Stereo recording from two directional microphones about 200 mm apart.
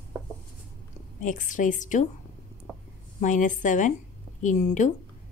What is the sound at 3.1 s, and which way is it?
A woman's voice, 40° left (ahead or behind).